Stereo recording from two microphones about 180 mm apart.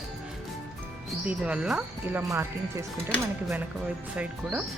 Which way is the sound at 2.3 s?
15° right (ahead or behind).